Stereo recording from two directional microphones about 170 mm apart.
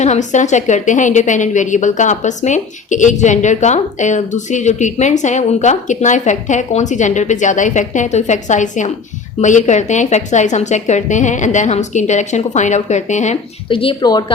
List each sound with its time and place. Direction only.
0.0 s a woman's voice: 45° left (ahead or behind)
13.7 s speech: 30° left (ahead or behind)